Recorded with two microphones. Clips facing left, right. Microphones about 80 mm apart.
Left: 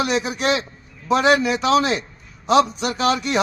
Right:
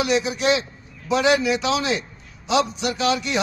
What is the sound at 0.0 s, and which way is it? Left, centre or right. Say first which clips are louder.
A man's voice: even; left.